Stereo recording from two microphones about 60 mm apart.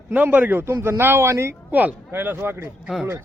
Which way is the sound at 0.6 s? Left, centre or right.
Right.